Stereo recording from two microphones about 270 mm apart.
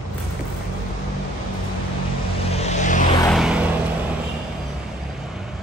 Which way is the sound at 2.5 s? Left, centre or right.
Left.